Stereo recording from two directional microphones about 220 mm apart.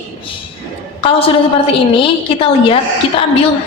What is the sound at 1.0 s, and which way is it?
A woman's voice, 25° left (ahead or behind).